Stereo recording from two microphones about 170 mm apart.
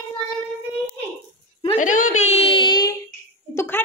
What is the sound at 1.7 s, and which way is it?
A woman's voice, 50° left (ahead or behind).